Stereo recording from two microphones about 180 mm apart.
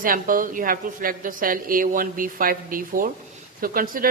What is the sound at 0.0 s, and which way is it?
Speech, 50° right (ahead or behind).